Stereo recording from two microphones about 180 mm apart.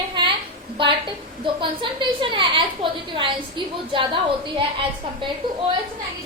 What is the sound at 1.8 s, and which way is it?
A woman's voice, 30° right (ahead or behind).